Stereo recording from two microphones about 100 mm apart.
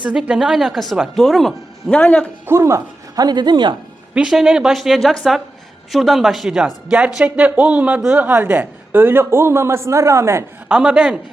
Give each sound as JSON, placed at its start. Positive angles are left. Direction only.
{"t": 0.0, "sound": "a woman's voice", "side_deg": -10}
{"t": 2.0, "sound": "a man's voice", "side_deg": 10}
{"t": 2.5, "sound": "speech", "side_deg": -30}
{"t": 4.1, "sound": "a woman's voice", "side_deg": -5}
{"t": 10.7, "sound": "a man's voice", "side_deg": -10}